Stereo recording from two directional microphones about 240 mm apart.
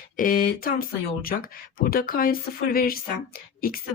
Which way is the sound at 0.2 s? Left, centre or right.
Left.